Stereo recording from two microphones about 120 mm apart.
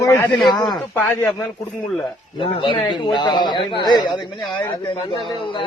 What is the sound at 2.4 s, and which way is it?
A man's voice, 45° left (ahead or behind).